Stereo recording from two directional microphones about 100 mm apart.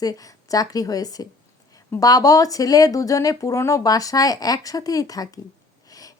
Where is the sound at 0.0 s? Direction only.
35° left (ahead or behind).